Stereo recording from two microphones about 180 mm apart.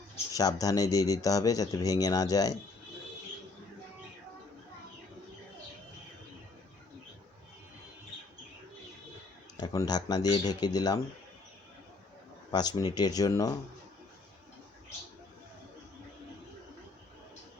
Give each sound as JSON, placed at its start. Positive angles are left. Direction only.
{"t": 0.3, "sound": "speech", "side_deg": 20}
{"t": 9.6, "sound": "speech", "side_deg": 20}
{"t": 12.5, "sound": "speech", "side_deg": 20}